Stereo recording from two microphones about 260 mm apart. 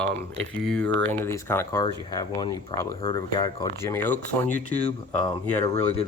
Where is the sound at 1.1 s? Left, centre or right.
Centre.